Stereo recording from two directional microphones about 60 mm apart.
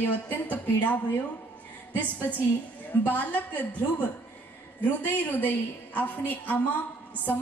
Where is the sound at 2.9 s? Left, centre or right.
Left.